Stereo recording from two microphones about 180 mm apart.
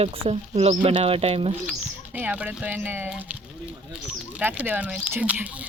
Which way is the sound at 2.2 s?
10° right (ahead or behind).